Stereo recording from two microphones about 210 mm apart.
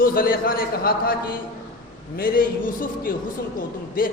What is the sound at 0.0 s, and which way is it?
A man's voice, 45° left (ahead or behind).